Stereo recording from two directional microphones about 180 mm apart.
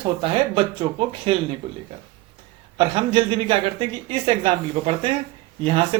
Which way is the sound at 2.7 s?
30° right (ahead or behind).